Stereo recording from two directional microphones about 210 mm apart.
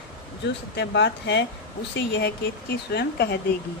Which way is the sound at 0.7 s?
55° left (ahead or behind).